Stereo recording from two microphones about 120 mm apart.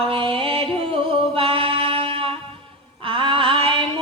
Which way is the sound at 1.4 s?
50° right (ahead or behind).